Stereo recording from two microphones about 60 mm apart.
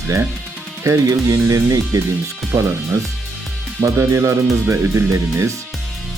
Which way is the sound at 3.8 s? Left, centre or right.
Right.